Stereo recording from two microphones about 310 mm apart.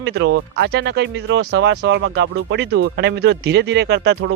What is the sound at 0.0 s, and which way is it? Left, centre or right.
Speech, right.